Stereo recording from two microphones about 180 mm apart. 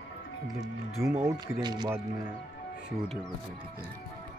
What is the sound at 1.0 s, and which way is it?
Speech, 15° right (ahead or behind).